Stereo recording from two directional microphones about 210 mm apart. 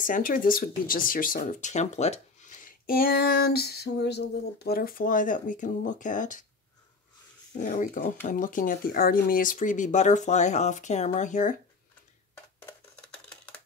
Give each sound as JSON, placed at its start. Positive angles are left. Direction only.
{"t": 0.0, "sound": "speech", "side_deg": 40}
{"t": 7.5, "sound": "speech", "side_deg": 40}